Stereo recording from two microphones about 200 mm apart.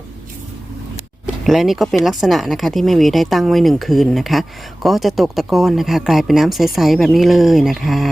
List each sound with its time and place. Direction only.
1.5 s speech: centre (ahead or behind)